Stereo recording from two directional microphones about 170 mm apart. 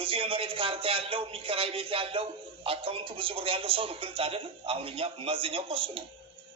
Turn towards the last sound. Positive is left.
turn(degrees=-30)  # may be behind; listen again after turning